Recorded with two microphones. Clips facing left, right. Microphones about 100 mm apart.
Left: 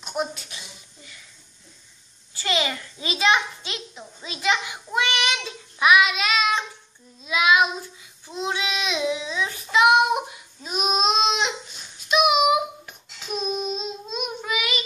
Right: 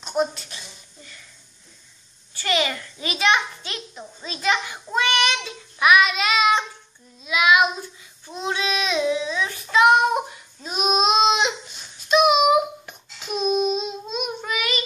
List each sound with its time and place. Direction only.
0.0 s a sound: 5° left (ahead or behind)
2.4 s a child's voice: 20° left (ahead or behind)
4.2 s child singing: 15° left (ahead or behind)
6.2 s child singing: 5° right (ahead or behind)
7.2 s child singing: 25° left (ahead or behind)
10.6 s a sound: centre (ahead or behind)
12.1 s child singing: 5° left (ahead or behind)